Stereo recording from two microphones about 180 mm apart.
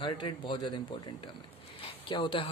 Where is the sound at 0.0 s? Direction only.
25° left (ahead or behind).